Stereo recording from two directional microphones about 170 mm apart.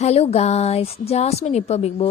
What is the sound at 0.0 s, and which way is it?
A woman's voice, 40° left (ahead or behind).